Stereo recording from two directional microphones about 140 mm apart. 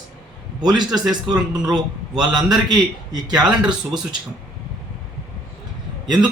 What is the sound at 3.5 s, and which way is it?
Speech, 5° right (ahead or behind).